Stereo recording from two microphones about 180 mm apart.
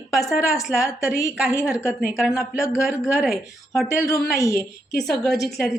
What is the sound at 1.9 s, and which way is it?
A woman's voice, 5° right (ahead or behind).